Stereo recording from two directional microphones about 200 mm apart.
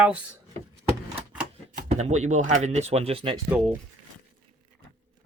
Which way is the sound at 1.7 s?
35° right (ahead or behind).